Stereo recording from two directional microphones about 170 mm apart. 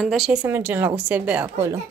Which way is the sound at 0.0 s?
Centre (ahead or behind).